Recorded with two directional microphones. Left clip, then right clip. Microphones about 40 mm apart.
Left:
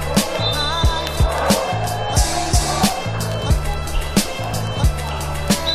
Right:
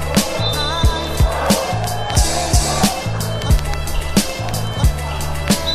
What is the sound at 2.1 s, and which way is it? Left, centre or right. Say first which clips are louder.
Music: right 3 dB; left.